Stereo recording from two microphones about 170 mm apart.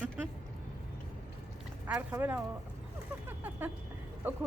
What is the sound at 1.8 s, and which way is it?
Speech, 10° right (ahead or behind).